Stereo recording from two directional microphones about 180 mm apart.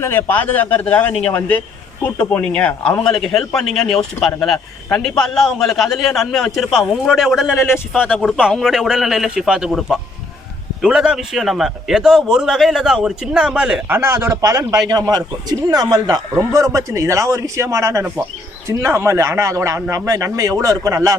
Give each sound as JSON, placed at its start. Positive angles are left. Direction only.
{"t": 0.0, "sound": "a man's voice", "side_deg": 10}
{"t": 7.5, "sound": "a man's voice", "side_deg": 15}
{"t": 8.4, "sound": "a man's voice", "side_deg": -5}